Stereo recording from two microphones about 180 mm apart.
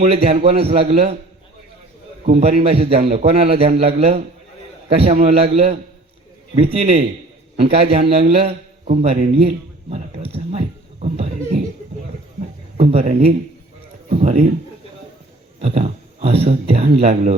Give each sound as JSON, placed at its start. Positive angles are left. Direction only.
{"t": 0.0, "sound": "speech", "side_deg": -35}
{"t": 2.2, "sound": "speech", "side_deg": -35}
{"t": 8.3, "sound": "a sound", "side_deg": -35}
{"t": 12.7, "sound": "speech", "side_deg": -35}
{"t": 15.6, "sound": "speech", "side_deg": -35}